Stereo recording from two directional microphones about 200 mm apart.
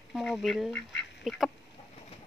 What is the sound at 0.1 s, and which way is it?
Speech, centre (ahead or behind).